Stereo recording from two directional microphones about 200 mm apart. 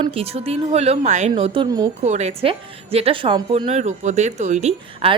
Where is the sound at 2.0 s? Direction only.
35° right (ahead or behind).